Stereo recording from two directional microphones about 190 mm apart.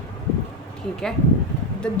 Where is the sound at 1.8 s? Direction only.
5° left (ahead or behind).